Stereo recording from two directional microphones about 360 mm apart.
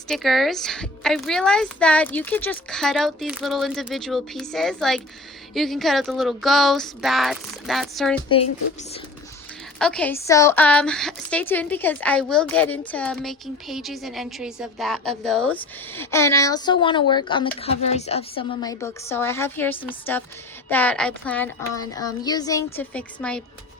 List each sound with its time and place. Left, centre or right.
0.1 s a woman's voice: centre
8.8 s speech: centre
9.7 s a woman's voice: centre